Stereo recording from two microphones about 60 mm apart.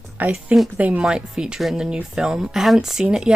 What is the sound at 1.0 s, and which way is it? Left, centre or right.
Speech, centre.